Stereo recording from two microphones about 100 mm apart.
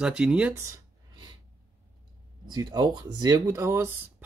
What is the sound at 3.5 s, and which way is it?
Speech, 25° right (ahead or behind).